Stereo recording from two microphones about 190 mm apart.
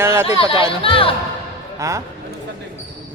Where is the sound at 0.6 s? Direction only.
30° left (ahead or behind).